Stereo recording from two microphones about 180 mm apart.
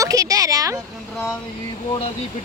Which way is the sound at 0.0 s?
20° right (ahead or behind).